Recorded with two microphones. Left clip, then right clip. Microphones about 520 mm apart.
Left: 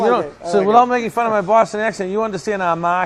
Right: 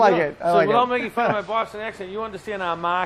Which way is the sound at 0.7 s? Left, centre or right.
Left.